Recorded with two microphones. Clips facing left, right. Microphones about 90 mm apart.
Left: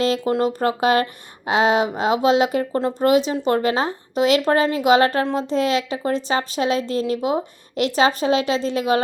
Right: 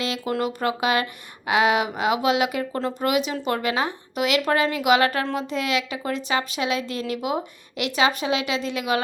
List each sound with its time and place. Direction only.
0.0 s a woman's voice: 35° left (ahead or behind)